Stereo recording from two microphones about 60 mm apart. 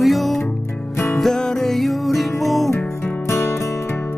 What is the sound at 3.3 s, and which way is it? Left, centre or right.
Music, left.